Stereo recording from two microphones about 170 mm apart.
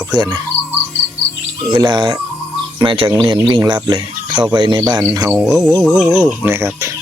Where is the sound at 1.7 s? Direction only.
25° right (ahead or behind).